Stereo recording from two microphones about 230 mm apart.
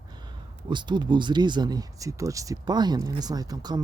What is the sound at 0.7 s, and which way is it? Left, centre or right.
Speech, centre.